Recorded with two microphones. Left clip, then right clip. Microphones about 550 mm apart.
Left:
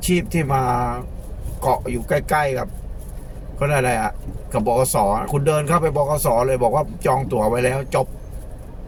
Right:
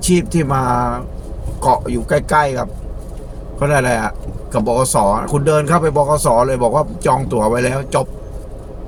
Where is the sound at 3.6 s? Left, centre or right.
Left.